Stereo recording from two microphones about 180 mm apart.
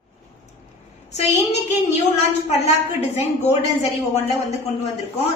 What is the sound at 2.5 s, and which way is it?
Speech, 35° left (ahead or behind).